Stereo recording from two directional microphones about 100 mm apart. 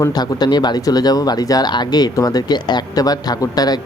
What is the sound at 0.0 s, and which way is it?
Speech, 45° left (ahead or behind).